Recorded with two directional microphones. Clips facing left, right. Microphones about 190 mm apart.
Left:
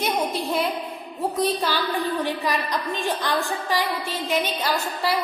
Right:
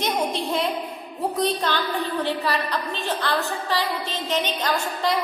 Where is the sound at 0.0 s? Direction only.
5° left (ahead or behind).